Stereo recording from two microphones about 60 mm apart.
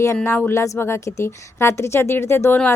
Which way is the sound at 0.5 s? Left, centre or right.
Left.